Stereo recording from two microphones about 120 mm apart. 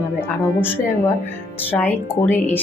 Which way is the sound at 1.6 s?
15° left (ahead or behind).